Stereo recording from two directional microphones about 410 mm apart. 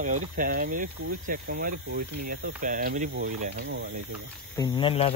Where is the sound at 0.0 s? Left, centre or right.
Centre.